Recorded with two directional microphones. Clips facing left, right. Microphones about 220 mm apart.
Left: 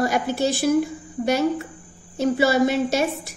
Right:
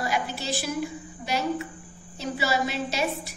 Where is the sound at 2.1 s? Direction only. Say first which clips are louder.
Left 9 dB; 50° left (ahead or behind).